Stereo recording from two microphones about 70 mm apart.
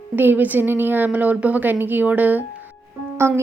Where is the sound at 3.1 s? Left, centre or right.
Right.